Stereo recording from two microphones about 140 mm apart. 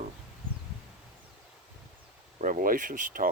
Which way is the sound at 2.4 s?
70° right (ahead or behind).